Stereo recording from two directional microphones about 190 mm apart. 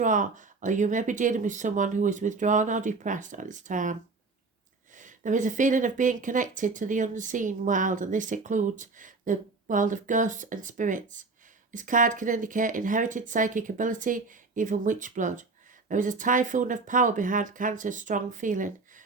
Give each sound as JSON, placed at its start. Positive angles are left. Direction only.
{"t": 0.0, "sound": "speech", "side_deg": -40}
{"t": 4.9, "sound": "speech", "side_deg": -40}